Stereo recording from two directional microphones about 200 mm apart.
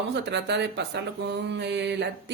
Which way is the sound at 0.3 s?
60° right (ahead or behind).